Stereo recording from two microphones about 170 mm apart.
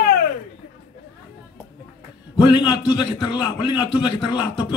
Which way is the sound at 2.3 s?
30° left (ahead or behind).